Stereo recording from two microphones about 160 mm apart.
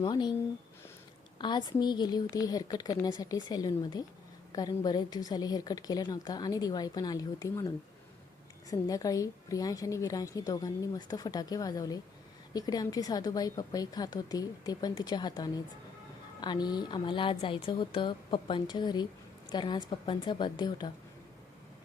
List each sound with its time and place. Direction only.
0.0 s a woman's voice: 30° left (ahead or behind)
1.4 s a woman's voice: 30° left (ahead or behind)
8.7 s a woman's voice: 20° left (ahead or behind)